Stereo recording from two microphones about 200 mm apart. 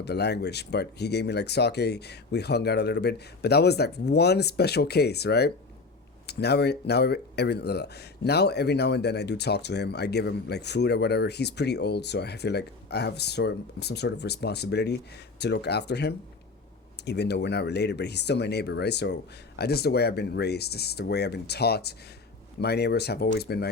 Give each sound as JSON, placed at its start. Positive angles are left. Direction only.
{"t": 0.0, "sound": "speech", "side_deg": 55}